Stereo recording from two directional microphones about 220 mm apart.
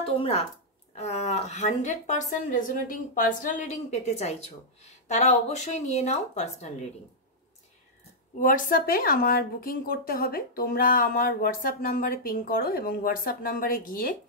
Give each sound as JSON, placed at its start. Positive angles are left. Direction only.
{"t": 0.0, "sound": "a woman's voice", "side_deg": 25}
{"t": 8.4, "sound": "a woman's voice", "side_deg": 40}